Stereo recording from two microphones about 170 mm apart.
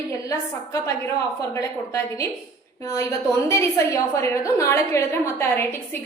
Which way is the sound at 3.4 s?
15° left (ahead or behind).